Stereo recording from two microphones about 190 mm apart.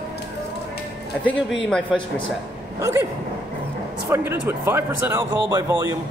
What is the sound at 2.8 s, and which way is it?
Speech, 15° right (ahead or behind).